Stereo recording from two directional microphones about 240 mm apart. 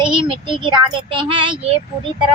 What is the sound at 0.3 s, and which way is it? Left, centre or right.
A woman's voice, right.